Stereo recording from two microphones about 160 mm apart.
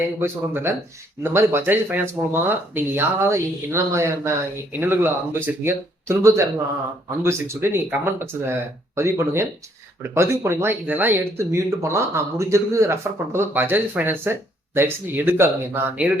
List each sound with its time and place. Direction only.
0.2 s speech: 15° right (ahead or behind)